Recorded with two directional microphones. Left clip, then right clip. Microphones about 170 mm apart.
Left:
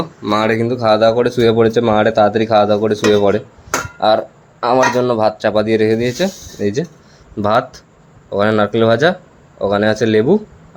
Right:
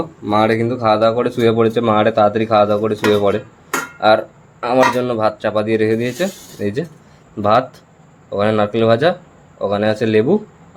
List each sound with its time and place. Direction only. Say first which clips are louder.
0.0 s speech: even; 5° left (ahead or behind)